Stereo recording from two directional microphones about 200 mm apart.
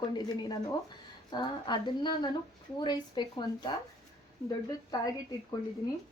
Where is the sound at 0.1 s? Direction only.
20° left (ahead or behind).